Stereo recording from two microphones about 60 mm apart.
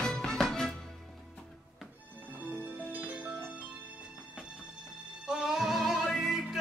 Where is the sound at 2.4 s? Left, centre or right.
Right.